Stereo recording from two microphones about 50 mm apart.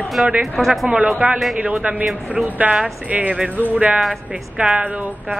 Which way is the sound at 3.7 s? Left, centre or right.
Right.